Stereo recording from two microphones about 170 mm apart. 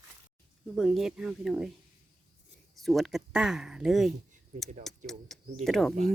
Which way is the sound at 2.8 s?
Centre (ahead or behind).